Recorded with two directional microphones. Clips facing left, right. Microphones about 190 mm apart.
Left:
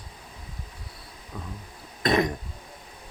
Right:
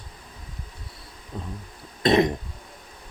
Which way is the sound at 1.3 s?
25° right (ahead or behind).